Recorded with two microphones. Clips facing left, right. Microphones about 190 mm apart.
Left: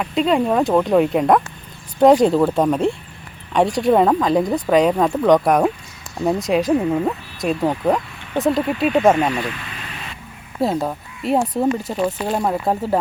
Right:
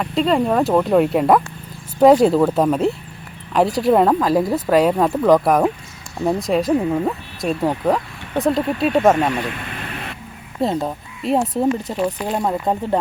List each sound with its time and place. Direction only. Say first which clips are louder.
0.0 s speech: even; centre (ahead or behind)
9.5 s a sound: right 3 dB; 50° right (ahead or behind)
10.6 s speech: even; centre (ahead or behind)